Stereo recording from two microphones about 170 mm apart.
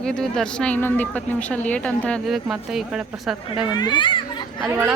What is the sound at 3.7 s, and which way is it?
Speech, 25° left (ahead or behind).